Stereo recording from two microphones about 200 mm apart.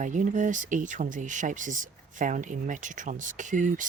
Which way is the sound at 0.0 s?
40° right (ahead or behind).